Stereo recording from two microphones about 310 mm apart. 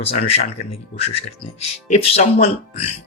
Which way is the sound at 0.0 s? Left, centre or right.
Centre.